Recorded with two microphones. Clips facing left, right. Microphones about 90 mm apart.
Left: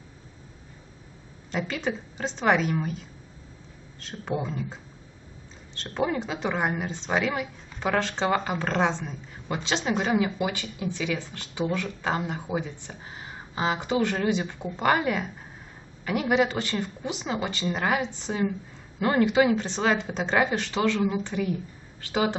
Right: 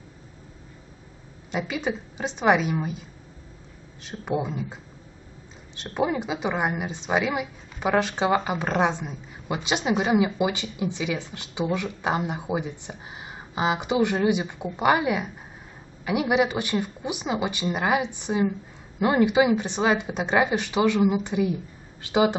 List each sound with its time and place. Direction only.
1.5 s a woman's voice: 10° right (ahead or behind)
5.8 s a woman's voice: 10° right (ahead or behind)